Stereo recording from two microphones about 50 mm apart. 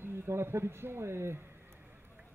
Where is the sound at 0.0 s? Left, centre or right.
Right.